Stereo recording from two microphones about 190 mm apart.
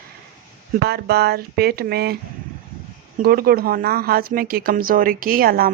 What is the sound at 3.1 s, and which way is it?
A woman's voice, 50° right (ahead or behind).